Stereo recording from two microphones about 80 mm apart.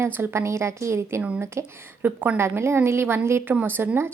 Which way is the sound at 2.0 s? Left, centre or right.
Right.